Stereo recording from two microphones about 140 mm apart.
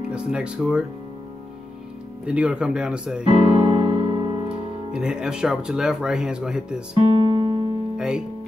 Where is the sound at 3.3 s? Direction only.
45° right (ahead or behind).